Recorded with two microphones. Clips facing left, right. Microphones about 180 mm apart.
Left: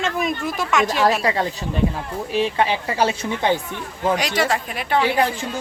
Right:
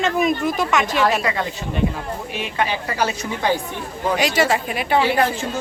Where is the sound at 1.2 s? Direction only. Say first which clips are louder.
Left 2 dB; 35° left (ahead or behind).